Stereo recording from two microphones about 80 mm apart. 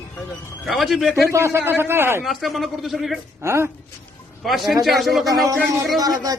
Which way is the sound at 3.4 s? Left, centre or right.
Right.